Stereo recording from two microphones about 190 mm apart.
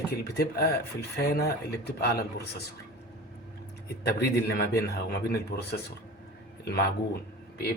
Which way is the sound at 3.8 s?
60° left (ahead or behind).